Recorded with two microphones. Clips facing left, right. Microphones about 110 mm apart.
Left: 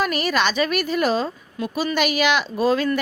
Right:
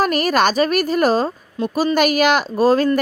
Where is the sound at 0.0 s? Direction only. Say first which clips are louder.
Right 5 dB; 45° right (ahead or behind).